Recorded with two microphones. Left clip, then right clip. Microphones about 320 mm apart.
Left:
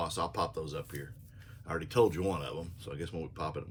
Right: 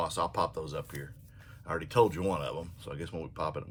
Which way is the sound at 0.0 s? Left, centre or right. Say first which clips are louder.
Right 3 dB; centre.